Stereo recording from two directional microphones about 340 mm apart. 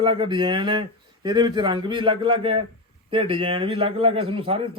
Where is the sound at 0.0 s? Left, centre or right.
Centre.